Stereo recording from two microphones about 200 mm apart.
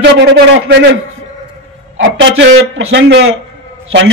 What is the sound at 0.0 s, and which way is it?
Speech, 60° right (ahead or behind).